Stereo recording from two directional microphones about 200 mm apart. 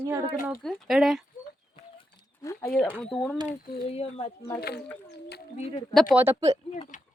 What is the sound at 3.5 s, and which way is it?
Speech, 30° left (ahead or behind).